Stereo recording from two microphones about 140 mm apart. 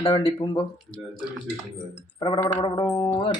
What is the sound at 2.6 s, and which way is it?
Speech, 35° left (ahead or behind).